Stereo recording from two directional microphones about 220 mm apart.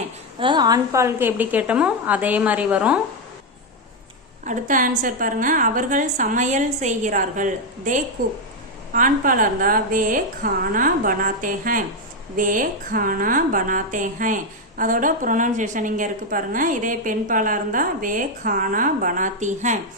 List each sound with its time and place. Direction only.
0.3 s a woman's voice: 20° right (ahead or behind)
4.4 s a woman's voice: 35° right (ahead or behind)